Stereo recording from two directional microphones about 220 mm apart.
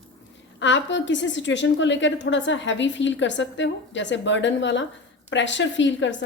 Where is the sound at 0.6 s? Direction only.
55° left (ahead or behind).